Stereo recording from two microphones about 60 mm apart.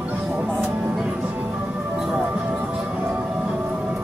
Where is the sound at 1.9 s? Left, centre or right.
Centre.